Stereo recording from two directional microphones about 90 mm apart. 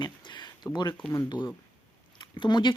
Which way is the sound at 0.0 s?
55° left (ahead or behind).